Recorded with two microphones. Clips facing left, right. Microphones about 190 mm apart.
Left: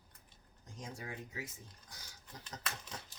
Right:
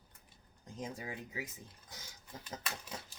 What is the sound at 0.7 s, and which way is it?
Speech, 20° right (ahead or behind).